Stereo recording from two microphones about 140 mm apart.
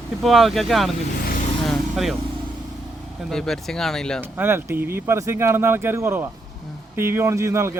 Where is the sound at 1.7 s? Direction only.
Centre (ahead or behind).